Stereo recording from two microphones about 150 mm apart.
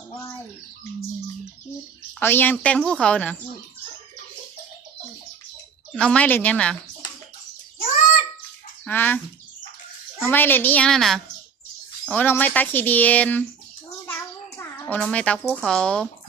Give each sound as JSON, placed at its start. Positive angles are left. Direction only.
{"t": 2.1, "sound": "speech", "side_deg": 15}
{"t": 5.9, "sound": "speech", "side_deg": 5}
{"t": 8.8, "sound": "speech", "side_deg": 10}
{"t": 10.2, "sound": "speech", "side_deg": 15}
{"t": 14.1, "sound": "a sound", "side_deg": 15}
{"t": 14.9, "sound": "speech", "side_deg": 10}